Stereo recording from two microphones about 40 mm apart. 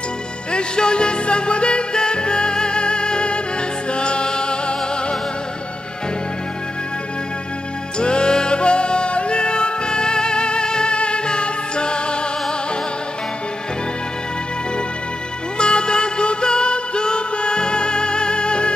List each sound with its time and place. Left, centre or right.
0.5 s music: left
8.0 s music: left
15.5 s music: left